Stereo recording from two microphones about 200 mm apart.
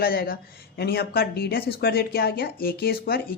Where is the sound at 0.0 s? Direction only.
45° left (ahead or behind).